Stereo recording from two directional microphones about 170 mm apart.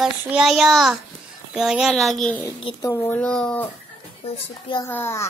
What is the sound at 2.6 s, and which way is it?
Speech, 30° left (ahead or behind).